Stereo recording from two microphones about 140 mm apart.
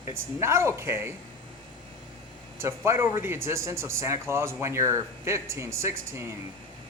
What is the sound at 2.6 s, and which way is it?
Speech, 20° right (ahead or behind).